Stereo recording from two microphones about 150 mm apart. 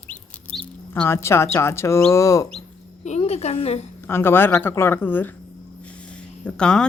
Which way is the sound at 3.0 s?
45° left (ahead or behind).